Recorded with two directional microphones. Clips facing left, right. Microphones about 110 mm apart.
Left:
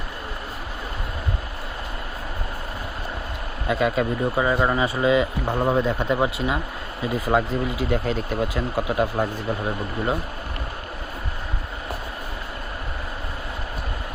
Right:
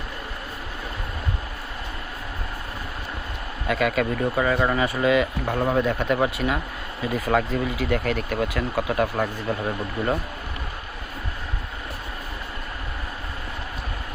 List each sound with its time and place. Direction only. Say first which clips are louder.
3.7 s speech: left 1 dB; 25° left (ahead or behind)
9.5 s speech: even; 5° left (ahead or behind)